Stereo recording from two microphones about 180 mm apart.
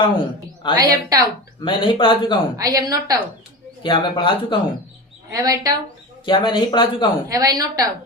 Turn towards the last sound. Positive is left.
turn(degrees=-20)  # may be behind; listen again after turning